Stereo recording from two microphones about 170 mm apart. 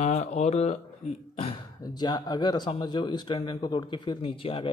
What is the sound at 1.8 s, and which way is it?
Speech, 25° left (ahead or behind).